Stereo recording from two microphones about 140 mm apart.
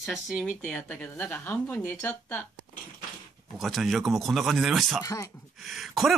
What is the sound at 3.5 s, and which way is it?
Speech, centre (ahead or behind).